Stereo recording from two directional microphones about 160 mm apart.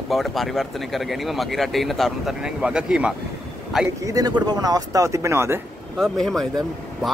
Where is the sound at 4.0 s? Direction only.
20° right (ahead or behind).